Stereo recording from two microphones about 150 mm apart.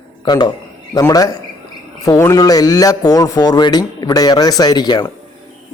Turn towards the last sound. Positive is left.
turn(degrees=30)  # may be behind; listen again after turning